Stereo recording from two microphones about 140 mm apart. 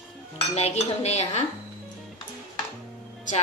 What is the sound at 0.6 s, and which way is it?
Speech, 50° left (ahead or behind).